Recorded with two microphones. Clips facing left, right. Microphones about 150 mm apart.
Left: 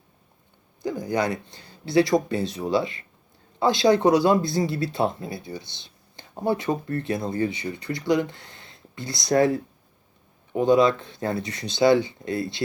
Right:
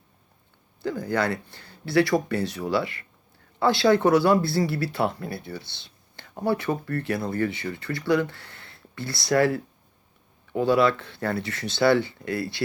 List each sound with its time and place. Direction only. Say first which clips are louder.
0.8 s speech: left 1 dB; 15° left (ahead or behind)